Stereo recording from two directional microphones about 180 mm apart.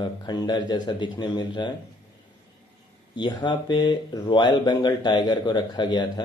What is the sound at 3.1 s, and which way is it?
Speech, 25° left (ahead or behind).